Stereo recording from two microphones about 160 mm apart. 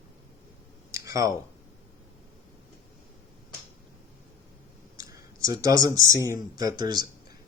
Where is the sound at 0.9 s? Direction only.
20° right (ahead or behind).